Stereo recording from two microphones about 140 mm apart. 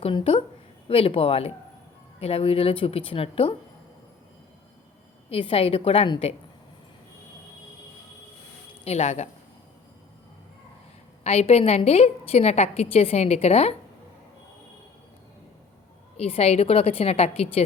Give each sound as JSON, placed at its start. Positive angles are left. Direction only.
{"t": 0.0, "sound": "a sound", "side_deg": 40}
{"t": 0.9, "sound": "a woman's voice", "side_deg": 40}
{"t": 5.3, "sound": "a woman's voice", "side_deg": 40}
{"t": 8.8, "sound": "a woman's voice", "side_deg": 50}
{"t": 11.2, "sound": "a woman's voice", "side_deg": 45}
{"t": 16.1, "sound": "a woman's voice", "side_deg": 45}